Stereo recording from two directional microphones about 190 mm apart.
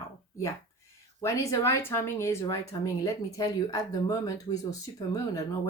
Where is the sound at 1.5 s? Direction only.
15° left (ahead or behind).